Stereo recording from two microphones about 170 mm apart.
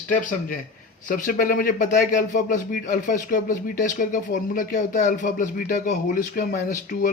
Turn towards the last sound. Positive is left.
turn(degrees=50)  # may be behind; listen again after turning